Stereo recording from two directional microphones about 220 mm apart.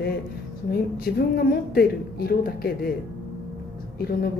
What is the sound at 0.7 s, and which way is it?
A woman's voice, 45° left (ahead or behind).